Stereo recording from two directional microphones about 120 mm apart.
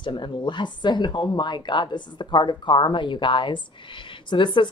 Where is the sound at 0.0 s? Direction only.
40° left (ahead or behind).